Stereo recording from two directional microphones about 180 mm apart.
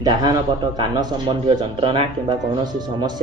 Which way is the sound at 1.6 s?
25° right (ahead or behind).